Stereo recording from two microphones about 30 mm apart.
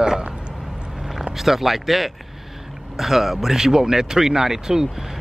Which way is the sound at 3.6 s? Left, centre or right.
Centre.